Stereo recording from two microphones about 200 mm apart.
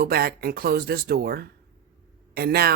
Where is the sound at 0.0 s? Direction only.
50° right (ahead or behind).